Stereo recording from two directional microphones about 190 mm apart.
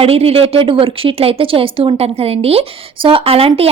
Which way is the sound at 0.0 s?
30° right (ahead or behind).